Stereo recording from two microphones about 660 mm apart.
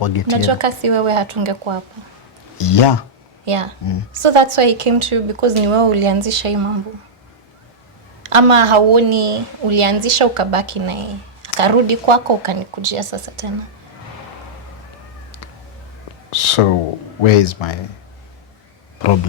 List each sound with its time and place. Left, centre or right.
0.0 s speech: left
0.3 s a woman's voice: right
2.6 s speech: left
3.4 s a woman's voice: right
8.2 s a woman's voice: right
16.3 s speech: left